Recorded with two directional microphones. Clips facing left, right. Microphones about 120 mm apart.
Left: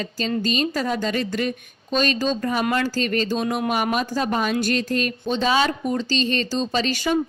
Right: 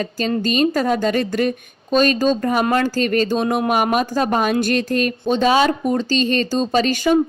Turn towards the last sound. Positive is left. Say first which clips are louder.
# right 6 dB
turn(degrees=-45)  # may be behind; listen again after turning